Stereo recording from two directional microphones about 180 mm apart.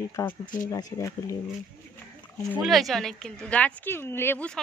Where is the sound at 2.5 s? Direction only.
Centre (ahead or behind).